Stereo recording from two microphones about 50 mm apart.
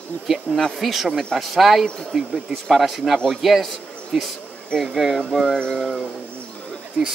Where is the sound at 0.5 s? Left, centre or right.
Centre.